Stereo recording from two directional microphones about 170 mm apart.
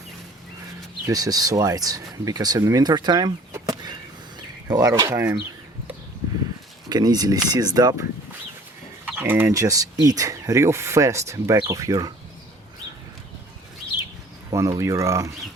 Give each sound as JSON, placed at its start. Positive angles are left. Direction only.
{"t": 1.0, "sound": "speech", "side_deg": -20}
{"t": 3.5, "sound": "chop", "side_deg": -25}
{"t": 4.7, "sound": "speech", "side_deg": -20}
{"t": 6.8, "sound": "speech", "side_deg": -25}
{"t": 9.0, "sound": "mechanisms", "side_deg": -10}
{"t": 14.5, "sound": "speech", "side_deg": -20}